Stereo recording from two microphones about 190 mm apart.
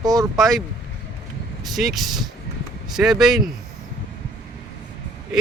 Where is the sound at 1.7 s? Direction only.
Centre (ahead or behind).